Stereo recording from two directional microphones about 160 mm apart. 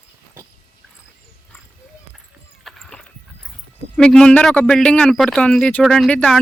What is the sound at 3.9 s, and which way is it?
A man's voice, 5° left (ahead or behind).